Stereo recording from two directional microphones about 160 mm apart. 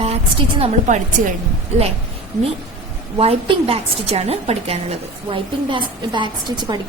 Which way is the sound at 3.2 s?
35° right (ahead or behind).